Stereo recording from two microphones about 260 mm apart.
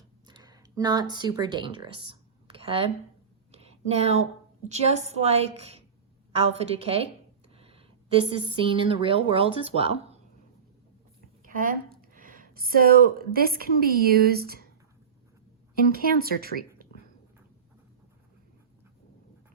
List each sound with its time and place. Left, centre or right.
0.3 s speech: centre
3.5 s a sound: right
4.7 s a woman's voice: right
11.4 s speech: right
15.7 s speech: right